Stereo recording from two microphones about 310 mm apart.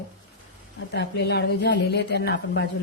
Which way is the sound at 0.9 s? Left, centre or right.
Left.